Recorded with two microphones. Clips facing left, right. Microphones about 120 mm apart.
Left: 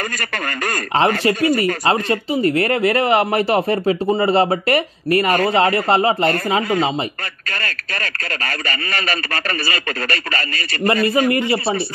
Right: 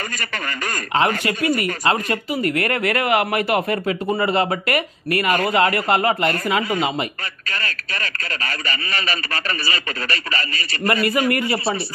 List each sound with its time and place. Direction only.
0.9 s speech: 30° left (ahead or behind)
7.4 s speech: 45° left (ahead or behind)
11.1 s speech: 25° left (ahead or behind)